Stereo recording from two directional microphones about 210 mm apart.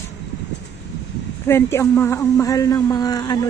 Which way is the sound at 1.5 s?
10° left (ahead or behind).